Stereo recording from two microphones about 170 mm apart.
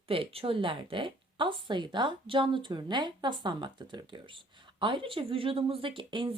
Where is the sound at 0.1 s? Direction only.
35° right (ahead or behind).